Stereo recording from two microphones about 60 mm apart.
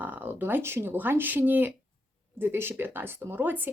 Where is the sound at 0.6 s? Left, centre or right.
Right.